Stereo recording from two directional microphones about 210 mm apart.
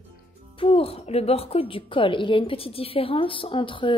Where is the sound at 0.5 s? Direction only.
25° left (ahead or behind).